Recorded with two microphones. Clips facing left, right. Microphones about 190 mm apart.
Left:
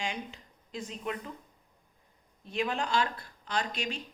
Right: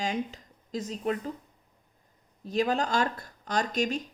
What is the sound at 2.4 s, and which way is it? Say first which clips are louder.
Speech: right 5 dB; 40° right (ahead or behind).